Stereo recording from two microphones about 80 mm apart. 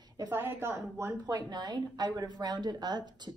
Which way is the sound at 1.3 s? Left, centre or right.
Right.